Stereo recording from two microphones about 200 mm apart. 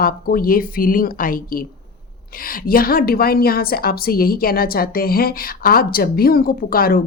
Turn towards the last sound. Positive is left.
turn(degrees=45)  # may be behind; listen again after turning